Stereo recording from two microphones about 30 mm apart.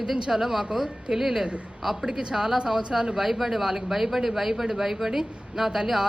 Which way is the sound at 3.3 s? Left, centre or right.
Centre.